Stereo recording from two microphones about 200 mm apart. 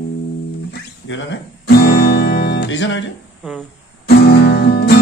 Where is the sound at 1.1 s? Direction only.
60° left (ahead or behind).